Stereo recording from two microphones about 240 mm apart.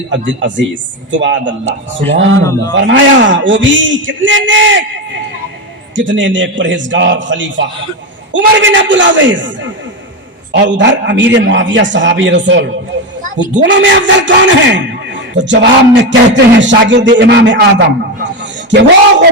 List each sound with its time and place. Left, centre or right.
0.3 s speech: right
2.4 s a man's voice: centre
2.8 s speech: right
6.0 s speech: right
13.2 s a woman's voice: right
13.6 s speech: right